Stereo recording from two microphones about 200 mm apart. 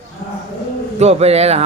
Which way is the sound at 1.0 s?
30° right (ahead or behind).